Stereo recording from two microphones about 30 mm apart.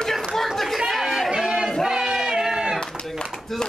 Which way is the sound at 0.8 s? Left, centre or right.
Centre.